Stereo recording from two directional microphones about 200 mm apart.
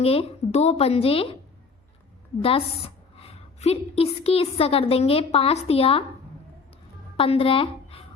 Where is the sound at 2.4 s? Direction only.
30° left (ahead or behind).